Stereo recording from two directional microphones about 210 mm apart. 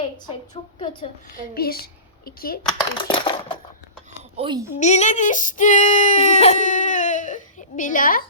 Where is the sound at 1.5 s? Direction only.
45° left (ahead or behind).